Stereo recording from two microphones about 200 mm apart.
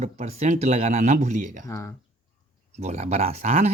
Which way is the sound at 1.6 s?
15° left (ahead or behind).